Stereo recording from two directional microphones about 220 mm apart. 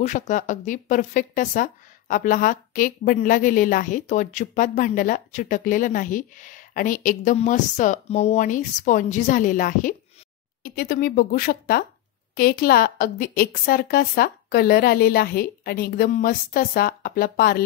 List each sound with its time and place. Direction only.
0.0 s a woman's voice: 35° left (ahead or behind)